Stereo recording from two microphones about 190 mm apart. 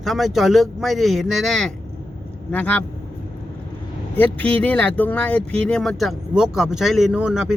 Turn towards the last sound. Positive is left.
turn(degrees=-5)  # may be behind; listen again after turning